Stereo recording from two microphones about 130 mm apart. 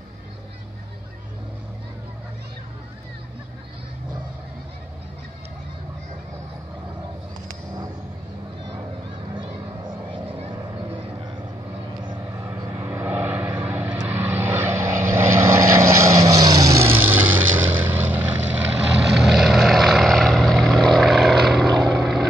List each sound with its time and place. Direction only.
12.4 s vehicle: 20° right (ahead or behind); by 22.2 s centre (ahead or behind)